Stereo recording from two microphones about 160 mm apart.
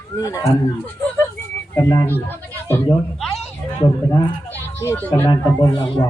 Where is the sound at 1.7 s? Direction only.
20° left (ahead or behind).